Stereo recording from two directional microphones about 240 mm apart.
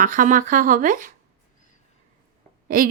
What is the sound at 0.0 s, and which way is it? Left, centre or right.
A woman's voice, right.